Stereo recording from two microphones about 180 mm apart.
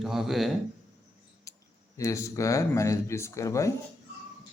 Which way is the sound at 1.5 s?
15° left (ahead or behind).